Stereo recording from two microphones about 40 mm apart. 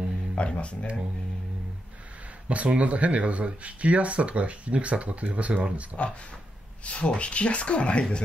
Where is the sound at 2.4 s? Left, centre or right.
Right.